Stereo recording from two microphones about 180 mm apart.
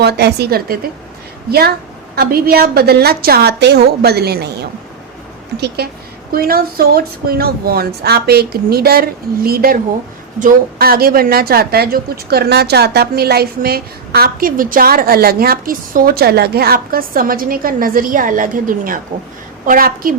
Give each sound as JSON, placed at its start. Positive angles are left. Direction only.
{"t": 0.0, "sound": "a woman's voice", "side_deg": -65}
{"t": 5.5, "sound": "a woman's voice", "side_deg": -65}